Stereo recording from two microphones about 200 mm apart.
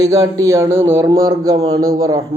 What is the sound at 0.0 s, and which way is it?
Speech, 15° right (ahead or behind).